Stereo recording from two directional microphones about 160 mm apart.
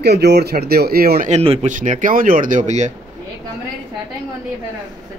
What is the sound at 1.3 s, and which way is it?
Speech, 40° right (ahead or behind).